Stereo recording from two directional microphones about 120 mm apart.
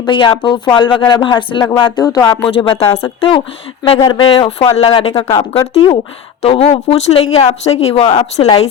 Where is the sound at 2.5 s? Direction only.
50° left (ahead or behind).